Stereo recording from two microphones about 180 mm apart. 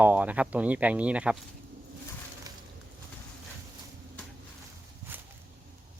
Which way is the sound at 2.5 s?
20° right (ahead or behind).